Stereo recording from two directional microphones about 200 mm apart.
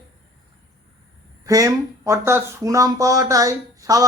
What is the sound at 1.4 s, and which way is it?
Speech, 15° right (ahead or behind).